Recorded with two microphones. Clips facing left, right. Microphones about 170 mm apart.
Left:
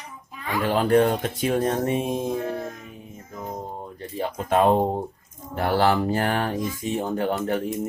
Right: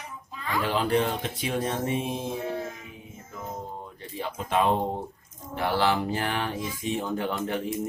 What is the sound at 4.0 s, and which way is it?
Speech, 45° left (ahead or behind).